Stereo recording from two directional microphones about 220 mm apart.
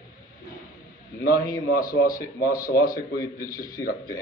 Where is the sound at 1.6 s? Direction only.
45° left (ahead or behind).